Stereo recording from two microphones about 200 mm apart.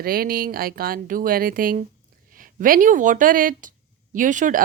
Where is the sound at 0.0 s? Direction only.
50° right (ahead or behind).